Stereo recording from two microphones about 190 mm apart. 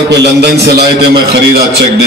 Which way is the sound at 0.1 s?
60° right (ahead or behind).